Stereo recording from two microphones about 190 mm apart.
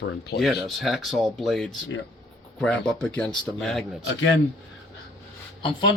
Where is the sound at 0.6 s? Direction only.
Centre (ahead or behind).